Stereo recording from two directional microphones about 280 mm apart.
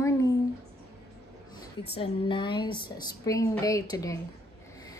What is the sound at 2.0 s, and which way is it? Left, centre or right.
A woman's voice, centre.